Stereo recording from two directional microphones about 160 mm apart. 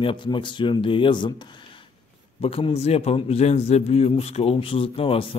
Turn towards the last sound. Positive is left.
turn(degrees=35)  # may be behind; listen again after turning